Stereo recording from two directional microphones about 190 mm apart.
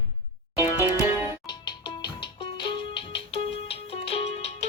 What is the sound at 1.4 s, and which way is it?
Music, 25° left (ahead or behind).